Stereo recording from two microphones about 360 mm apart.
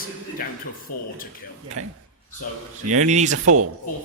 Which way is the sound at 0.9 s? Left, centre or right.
Left.